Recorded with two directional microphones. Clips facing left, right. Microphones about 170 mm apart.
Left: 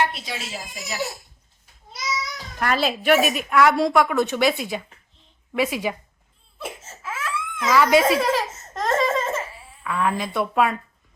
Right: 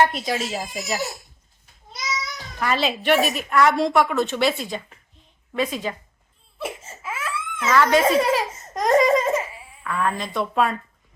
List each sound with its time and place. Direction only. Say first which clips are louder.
0.0 s speech: right 5 dB; 45° right (ahead or behind)
2.6 s a woman's voice: even; 5° left (ahead or behind)
4.2 s a woman's voice: left 1 dB; 15° left (ahead or behind)
6.6 s crying: right 3 dB; 10° right (ahead or behind)
7.7 s speech: left 1 dB; 10° left (ahead or behind)
8.2 s speech: right 1 dB; 10° right (ahead or behind)
8.7 s laughter: right 5 dB; 15° right (ahead or behind)
9.8 s a woman's voice: left 1 dB; 5° left (ahead or behind)